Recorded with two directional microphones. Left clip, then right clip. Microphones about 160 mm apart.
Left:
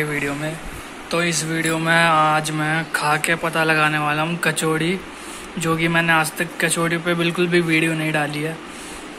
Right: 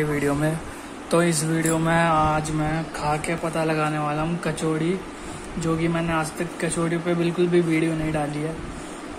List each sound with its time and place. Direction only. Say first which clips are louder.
0.0 s speech: left 1 dB; 15° right (ahead or behind)
1.1 s speech: even; 30° right (ahead or behind)
1.6 s speech: left 5 dB; 15° right (ahead or behind); by 8.4 s 5° left (ahead or behind)